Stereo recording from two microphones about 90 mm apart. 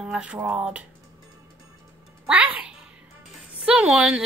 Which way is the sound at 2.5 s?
10° right (ahead or behind).